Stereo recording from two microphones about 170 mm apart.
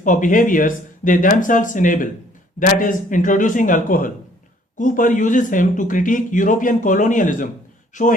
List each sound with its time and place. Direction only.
0.0 s speech: 50° left (ahead or behind)